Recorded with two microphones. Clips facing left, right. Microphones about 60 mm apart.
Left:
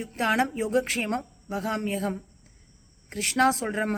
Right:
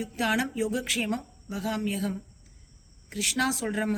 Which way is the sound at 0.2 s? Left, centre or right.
Left.